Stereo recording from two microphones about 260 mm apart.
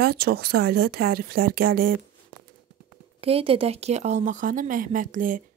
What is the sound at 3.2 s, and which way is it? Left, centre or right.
Speech, right.